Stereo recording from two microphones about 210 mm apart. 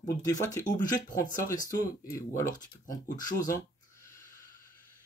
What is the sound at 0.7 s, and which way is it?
Speech, 35° left (ahead or behind).